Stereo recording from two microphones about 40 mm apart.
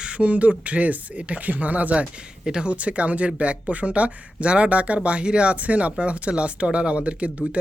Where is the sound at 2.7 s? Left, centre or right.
Right.